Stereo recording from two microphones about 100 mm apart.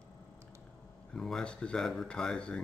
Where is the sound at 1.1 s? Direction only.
5° left (ahead or behind).